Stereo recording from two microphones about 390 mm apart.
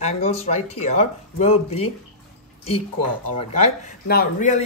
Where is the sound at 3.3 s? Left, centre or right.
Centre.